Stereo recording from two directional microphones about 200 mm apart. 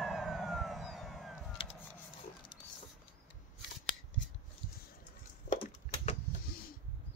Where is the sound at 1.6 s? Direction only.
25° left (ahead or behind).